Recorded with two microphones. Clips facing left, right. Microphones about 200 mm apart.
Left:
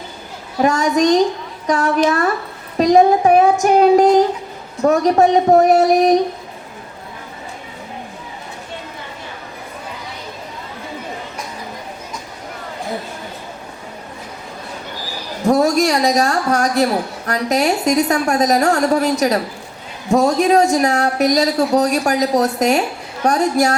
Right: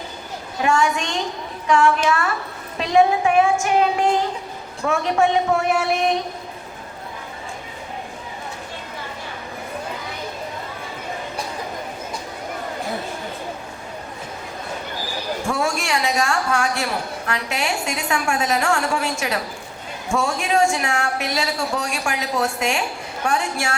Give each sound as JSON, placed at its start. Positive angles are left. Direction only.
{"t": 0.6, "sound": "a woman's voice", "side_deg": 40}
{"t": 15.4, "sound": "a woman's voice", "side_deg": 40}